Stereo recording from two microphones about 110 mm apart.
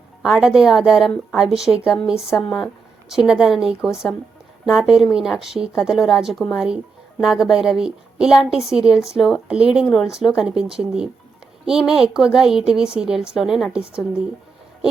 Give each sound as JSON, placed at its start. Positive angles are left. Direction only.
{"t": 0.2, "sound": "speech", "side_deg": -5}